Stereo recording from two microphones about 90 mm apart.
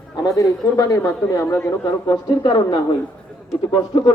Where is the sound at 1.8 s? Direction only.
50° left (ahead or behind).